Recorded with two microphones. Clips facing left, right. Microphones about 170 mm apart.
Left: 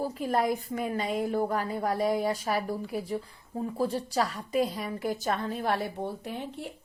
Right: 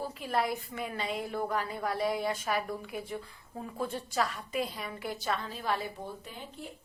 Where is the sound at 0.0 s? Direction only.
40° left (ahead or behind).